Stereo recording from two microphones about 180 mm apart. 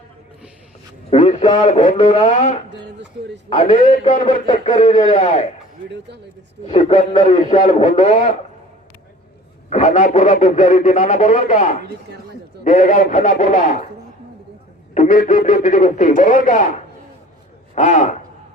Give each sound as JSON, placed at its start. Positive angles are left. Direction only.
{"t": 1.2, "sound": "a man's voice", "side_deg": 35}
{"t": 6.7, "sound": "speech", "side_deg": 35}
{"t": 9.6, "sound": "speech", "side_deg": 40}
{"t": 14.9, "sound": "speech", "side_deg": 45}